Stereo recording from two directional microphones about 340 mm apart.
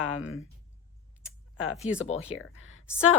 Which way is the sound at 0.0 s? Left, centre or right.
Left.